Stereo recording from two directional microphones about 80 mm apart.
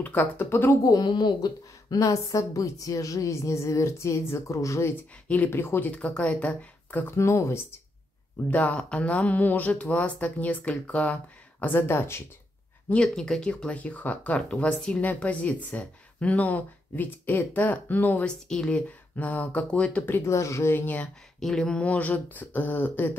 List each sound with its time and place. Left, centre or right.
0.0 s speech: left
0.8 s a woman's voice: left
8.5 s speech: centre
11.6 s speech: left
12.9 s speech: centre
18.2 s speech: centre
20.1 s speech: left
21.4 s speech: centre; by 23.1 s left